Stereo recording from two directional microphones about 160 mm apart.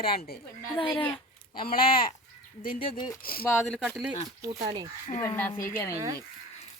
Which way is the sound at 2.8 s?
25° left (ahead or behind).